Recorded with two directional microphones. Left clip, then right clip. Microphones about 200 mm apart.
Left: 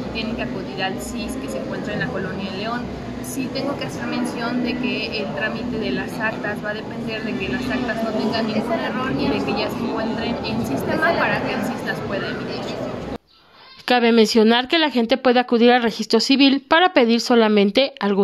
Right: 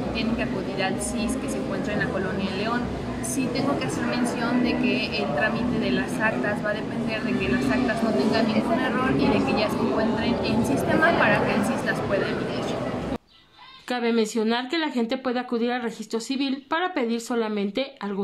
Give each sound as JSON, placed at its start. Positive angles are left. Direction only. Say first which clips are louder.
{"t": 4.1, "sound": "a woman's voice", "louder": "left 2 dB", "side_deg": -5}
{"t": 9.2, "sound": "a woman's voice", "louder": "left 2 dB", "side_deg": -5}
{"t": 13.8, "sound": "speech", "louder": "left 9 dB", "side_deg": 45}